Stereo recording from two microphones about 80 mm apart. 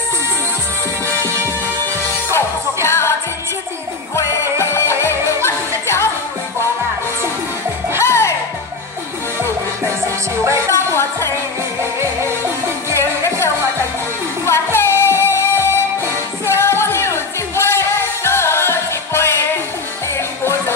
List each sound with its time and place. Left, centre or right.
2.9 s music: left
8.0 s music: left
11.0 s a sound: left
12.9 s music: right
14.4 s music: left